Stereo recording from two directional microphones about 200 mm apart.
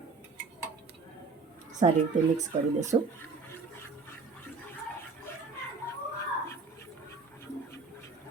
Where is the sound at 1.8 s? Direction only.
30° right (ahead or behind).